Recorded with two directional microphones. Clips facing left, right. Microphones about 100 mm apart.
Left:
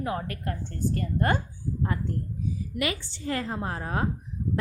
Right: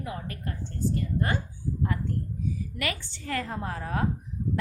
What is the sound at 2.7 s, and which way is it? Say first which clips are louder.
A woman's voice: left 3 dB; 20° left (ahead or behind).